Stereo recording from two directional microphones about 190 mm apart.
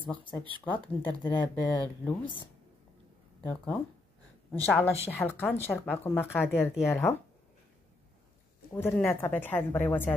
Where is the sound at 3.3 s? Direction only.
10° left (ahead or behind).